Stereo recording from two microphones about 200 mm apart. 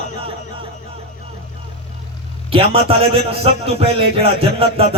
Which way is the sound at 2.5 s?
30° right (ahead or behind).